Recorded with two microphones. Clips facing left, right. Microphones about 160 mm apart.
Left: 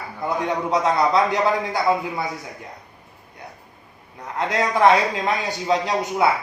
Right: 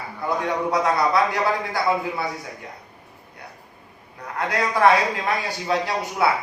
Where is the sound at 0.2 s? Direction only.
20° left (ahead or behind).